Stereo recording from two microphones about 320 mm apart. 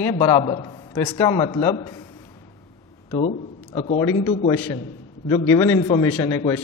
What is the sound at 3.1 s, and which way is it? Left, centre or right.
A woman's voice, centre.